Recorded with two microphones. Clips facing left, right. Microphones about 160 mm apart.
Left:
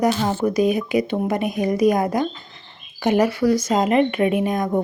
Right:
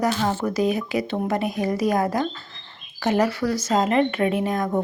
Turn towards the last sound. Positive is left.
turn(degrees=15)  # may be behind; listen again after turning